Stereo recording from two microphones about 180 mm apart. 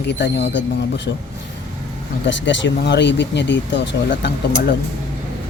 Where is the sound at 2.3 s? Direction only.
85° left.